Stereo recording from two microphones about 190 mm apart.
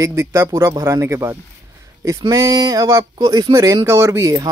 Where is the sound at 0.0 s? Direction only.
15° right (ahead or behind).